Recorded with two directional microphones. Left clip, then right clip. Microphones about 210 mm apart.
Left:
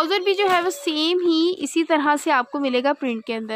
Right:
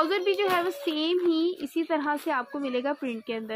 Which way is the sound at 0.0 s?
25° left (ahead or behind).